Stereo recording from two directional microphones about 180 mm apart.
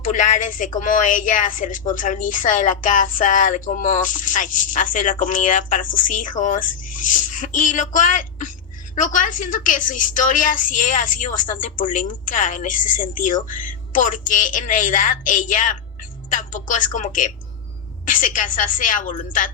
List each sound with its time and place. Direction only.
0.0 s a woman's voice: 45° left (ahead or behind)